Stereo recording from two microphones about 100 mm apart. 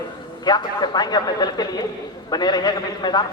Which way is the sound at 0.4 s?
45° left (ahead or behind).